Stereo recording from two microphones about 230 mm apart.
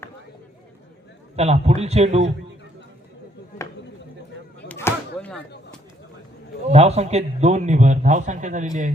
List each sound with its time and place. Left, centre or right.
1.4 s a man's voice: right
4.7 s a sound: centre
6.7 s a man's voice: right